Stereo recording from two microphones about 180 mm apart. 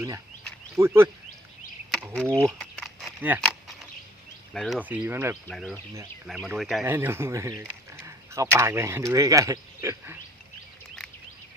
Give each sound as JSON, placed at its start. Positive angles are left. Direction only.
{"t": 0.8, "sound": "speech", "side_deg": -15}
{"t": 2.3, "sound": "a sound", "side_deg": 0}
{"t": 3.2, "sound": "a sound", "side_deg": -10}
{"t": 4.5, "sound": "speech", "side_deg": 0}
{"t": 4.9, "sound": "speech", "side_deg": -10}
{"t": 5.5, "sound": "speech", "side_deg": 5}
{"t": 6.8, "sound": "speech", "side_deg": -15}